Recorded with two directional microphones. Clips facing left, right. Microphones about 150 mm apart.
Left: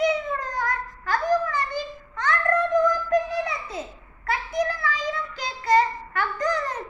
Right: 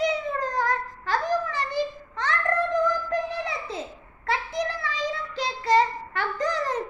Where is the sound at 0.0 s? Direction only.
30° right (ahead or behind).